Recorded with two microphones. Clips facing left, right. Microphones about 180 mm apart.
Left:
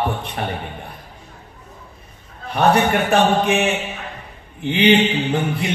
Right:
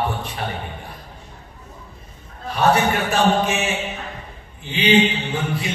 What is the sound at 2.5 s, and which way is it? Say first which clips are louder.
Speech: left 2 dB; 60° left (ahead or behind).